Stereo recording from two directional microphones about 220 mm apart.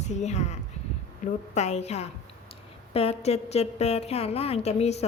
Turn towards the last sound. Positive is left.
turn(degrees=30)  # may be behind; listen again after turning